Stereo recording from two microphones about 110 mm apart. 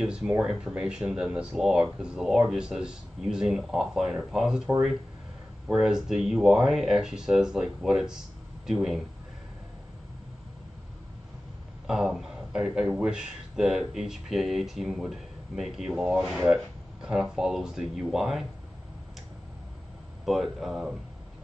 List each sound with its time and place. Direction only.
0.0 s speech: 5° right (ahead or behind)
5.7 s a man's voice: 5° right (ahead or behind)
11.9 s a man's voice: 5° right (ahead or behind)
20.2 s a man's voice: centre (ahead or behind)